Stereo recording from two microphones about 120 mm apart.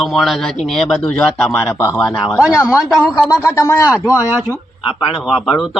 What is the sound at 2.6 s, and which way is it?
Speech, 25° left (ahead or behind).